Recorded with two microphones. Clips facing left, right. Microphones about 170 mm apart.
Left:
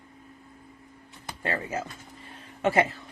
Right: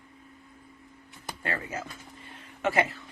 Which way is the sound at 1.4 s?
30° left (ahead or behind).